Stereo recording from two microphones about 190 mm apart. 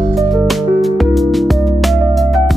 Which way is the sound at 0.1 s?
Centre (ahead or behind).